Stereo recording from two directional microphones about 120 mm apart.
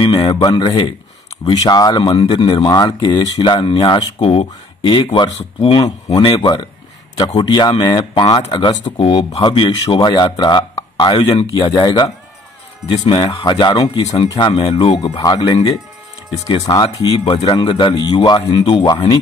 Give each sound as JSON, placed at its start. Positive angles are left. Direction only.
{"t": 0.0, "sound": "a man's voice", "side_deg": 35}
{"t": 14.7, "sound": "speech", "side_deg": 55}
{"t": 15.0, "sound": "speech", "side_deg": 35}